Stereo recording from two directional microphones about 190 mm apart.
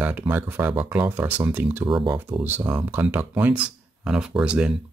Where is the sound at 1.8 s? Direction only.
25° right (ahead or behind).